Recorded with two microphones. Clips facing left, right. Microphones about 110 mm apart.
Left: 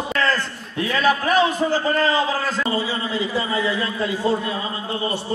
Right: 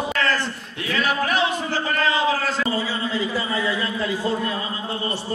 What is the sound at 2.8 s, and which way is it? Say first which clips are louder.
A man's voice: left 1 dB; 15° left (ahead or behind).